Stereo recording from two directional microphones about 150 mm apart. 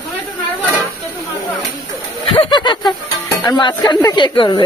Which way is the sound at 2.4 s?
30° left (ahead or behind).